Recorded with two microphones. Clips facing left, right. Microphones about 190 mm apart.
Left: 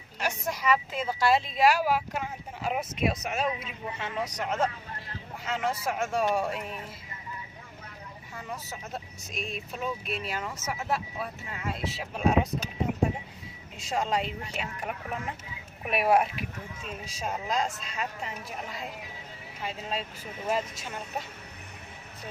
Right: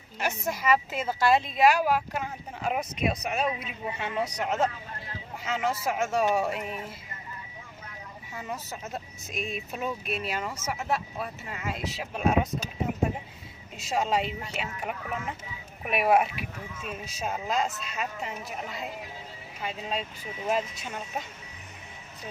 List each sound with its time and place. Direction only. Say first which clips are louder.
0.2 s speech: right 1 dB; 5° right (ahead or behind)
8.4 s speech: right 3 dB; centre (ahead or behind)
13.7 s speech: right 2 dB; 5° right (ahead or behind)
16.3 s speech: even; 55° right (ahead or behind)
17.2 s speech: right 1 dB; 5° right (ahead or behind)